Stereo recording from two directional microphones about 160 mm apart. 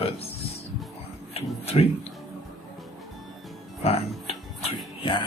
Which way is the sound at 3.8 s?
40° left (ahead or behind).